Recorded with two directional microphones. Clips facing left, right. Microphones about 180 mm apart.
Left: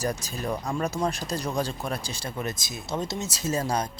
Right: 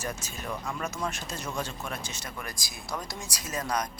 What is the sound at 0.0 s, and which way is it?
Speech, 35° left (ahead or behind).